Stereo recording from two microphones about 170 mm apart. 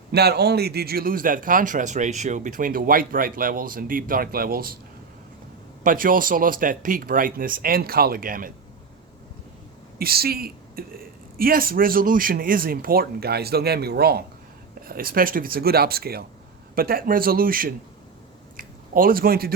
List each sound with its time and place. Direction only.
0.1 s speech: 70° right (ahead or behind)
5.8 s speech: 55° right (ahead or behind)
10.0 s speech: 65° right (ahead or behind)
18.5 s a sound: 55° right (ahead or behind)